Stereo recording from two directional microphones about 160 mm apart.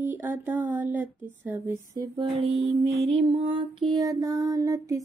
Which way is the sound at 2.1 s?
40° right (ahead or behind).